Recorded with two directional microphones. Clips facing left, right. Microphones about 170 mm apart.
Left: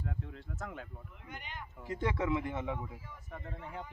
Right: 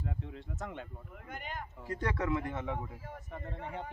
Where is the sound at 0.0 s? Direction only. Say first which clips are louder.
Right 1 dB; centre (ahead or behind).